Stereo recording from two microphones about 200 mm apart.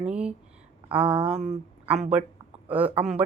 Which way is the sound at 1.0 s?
25° right (ahead or behind).